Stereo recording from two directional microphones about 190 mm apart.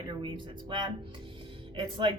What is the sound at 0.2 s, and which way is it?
A woman's voice, 25° right (ahead or behind).